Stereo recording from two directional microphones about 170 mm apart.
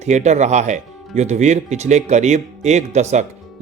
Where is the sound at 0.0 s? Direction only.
45° right (ahead or behind).